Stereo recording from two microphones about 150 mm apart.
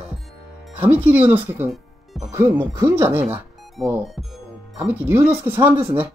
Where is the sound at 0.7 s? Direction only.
10° right (ahead or behind).